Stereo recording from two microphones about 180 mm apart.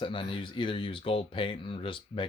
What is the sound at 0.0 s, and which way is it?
Speech, 30° left (ahead or behind).